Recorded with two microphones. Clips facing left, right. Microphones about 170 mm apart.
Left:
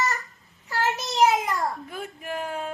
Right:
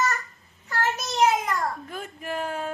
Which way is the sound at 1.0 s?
Centre (ahead or behind).